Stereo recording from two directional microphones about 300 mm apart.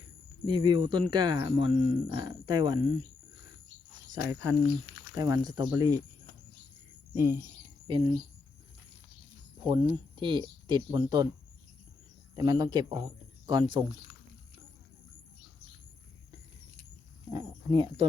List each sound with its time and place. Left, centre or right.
0.4 s speech: centre
4.1 s speech: centre
7.1 s speech: centre
9.6 s speech: centre
12.4 s speech: centre
17.3 s speech: centre